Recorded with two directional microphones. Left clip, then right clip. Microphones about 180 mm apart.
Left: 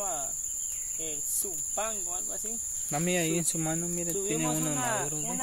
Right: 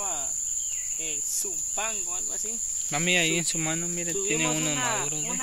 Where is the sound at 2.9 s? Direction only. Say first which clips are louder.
Right 5 dB; centre (ahead or behind).